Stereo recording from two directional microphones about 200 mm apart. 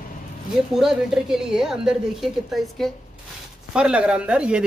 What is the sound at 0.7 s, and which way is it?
A woman's voice, centre (ahead or behind).